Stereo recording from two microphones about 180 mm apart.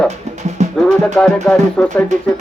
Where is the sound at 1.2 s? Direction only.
5° left (ahead or behind).